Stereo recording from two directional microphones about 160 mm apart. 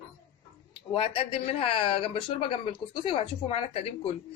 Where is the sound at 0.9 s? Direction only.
35° left (ahead or behind).